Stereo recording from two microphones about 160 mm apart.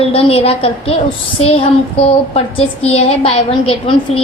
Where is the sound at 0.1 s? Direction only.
40° left (ahead or behind).